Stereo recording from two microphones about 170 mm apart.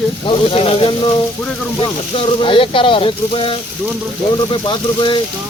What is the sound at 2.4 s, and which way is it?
Speech, 30° left (ahead or behind).